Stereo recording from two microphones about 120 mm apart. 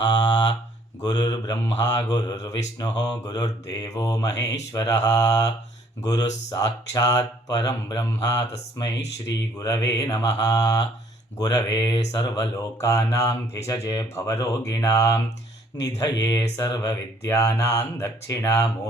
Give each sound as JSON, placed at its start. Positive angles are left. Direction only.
{"t": 0.0, "sound": "a sound", "side_deg": 35}
{"t": 1.0, "sound": "speech", "side_deg": 35}
{"t": 6.5, "sound": "mantra", "side_deg": 30}